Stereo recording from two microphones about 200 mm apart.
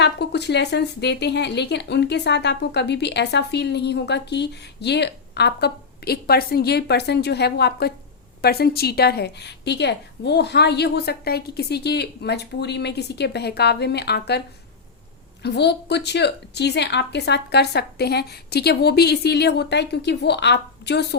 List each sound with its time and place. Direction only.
0.0 s a woman's voice: 55° left (ahead or behind)
15.4 s a woman's voice: 60° left (ahead or behind)